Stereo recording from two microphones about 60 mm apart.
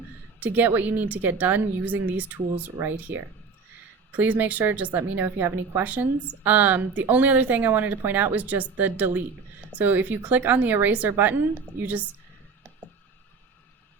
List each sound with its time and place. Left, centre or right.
0.3 s a woman's voice: right
4.1 s a woman's voice: right
5.8 s a woman's voice: right